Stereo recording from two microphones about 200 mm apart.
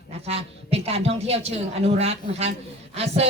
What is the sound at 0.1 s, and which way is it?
Speech, 30° right (ahead or behind).